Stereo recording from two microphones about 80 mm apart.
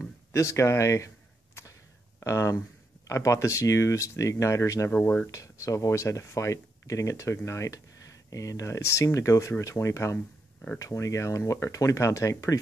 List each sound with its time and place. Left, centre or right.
0.3 s a sound: left
2.1 s speech: left
4.9 s speech: left
5.2 s speech: left
10.1 s a sound: centre
10.8 s speech: left